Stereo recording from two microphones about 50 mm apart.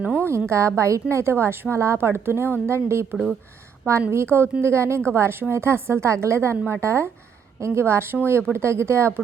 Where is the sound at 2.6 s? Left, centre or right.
Right.